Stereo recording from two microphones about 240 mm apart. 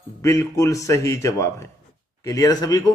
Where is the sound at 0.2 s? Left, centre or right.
Centre.